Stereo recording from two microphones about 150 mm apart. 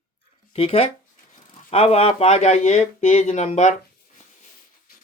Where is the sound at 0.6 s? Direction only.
40° left (ahead or behind).